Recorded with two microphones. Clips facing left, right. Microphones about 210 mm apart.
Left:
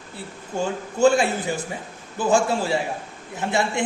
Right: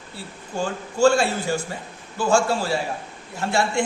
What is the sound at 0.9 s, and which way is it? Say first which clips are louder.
A man's voice: even; 20° left (ahead or behind).